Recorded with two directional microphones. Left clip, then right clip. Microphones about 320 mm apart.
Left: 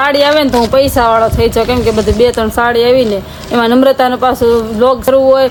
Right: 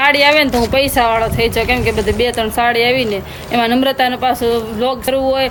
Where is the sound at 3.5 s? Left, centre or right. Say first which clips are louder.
Left 4 dB; left.